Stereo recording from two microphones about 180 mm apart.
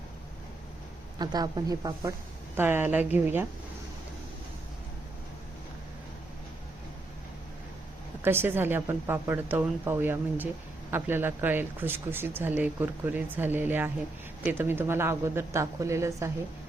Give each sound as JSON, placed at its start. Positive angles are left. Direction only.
{"t": 1.2, "sound": "a woman's voice", "side_deg": -25}
{"t": 8.2, "sound": "speech", "side_deg": -10}